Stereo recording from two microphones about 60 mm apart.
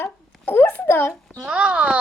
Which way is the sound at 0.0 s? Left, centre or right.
Left.